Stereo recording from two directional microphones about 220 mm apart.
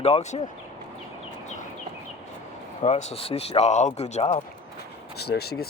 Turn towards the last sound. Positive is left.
turn(degrees=45)  # may be behind; listen again after turning